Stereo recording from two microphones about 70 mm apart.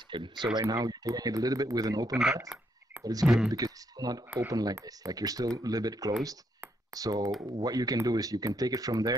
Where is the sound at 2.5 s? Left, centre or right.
Centre.